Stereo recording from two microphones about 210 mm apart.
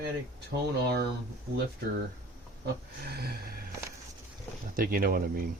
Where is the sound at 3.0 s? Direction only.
50° right (ahead or behind).